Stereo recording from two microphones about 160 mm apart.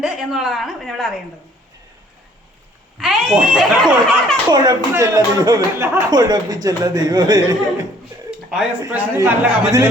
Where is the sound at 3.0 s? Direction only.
Centre (ahead or behind).